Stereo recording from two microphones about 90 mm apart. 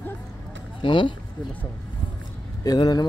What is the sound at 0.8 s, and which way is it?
Speech, 65° left (ahead or behind).